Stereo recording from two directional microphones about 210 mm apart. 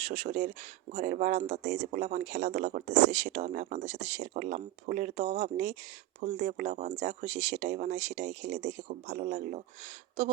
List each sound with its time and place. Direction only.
0.0 s speech: 30° right (ahead or behind)